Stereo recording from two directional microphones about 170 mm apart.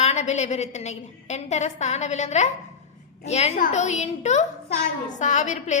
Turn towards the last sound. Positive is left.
turn(degrees=45)  # may be behind; listen again after turning